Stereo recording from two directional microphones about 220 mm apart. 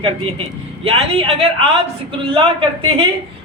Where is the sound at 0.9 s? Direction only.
25° right (ahead or behind).